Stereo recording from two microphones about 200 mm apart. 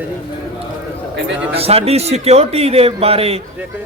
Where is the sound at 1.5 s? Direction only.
30° right (ahead or behind).